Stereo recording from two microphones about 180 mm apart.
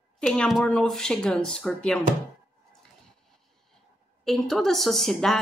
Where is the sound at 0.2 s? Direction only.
Centre (ahead or behind).